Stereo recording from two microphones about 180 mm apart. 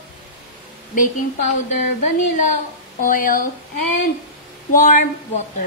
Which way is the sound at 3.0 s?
50° left (ahead or behind).